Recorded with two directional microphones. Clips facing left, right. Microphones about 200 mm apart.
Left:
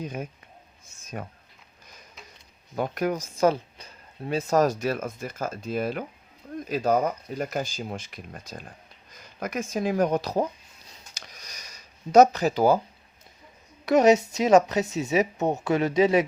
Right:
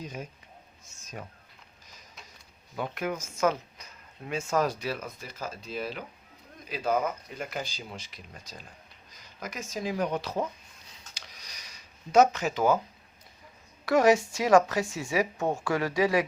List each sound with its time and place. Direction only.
0.0 s speech: 55° left (ahead or behind)
2.7 s speech: 40° left (ahead or behind)
11.1 s a sound: 45° left (ahead or behind)
13.8 s a woman's voice: 20° left (ahead or behind)